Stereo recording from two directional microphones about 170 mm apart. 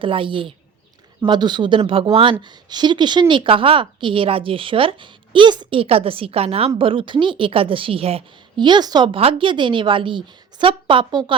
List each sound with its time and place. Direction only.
0.0 s a woman's voice: 30° right (ahead or behind)